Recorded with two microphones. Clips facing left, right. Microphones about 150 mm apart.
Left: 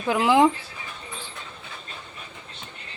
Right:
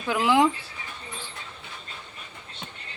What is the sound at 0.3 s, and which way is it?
Speech, 20° left (ahead or behind).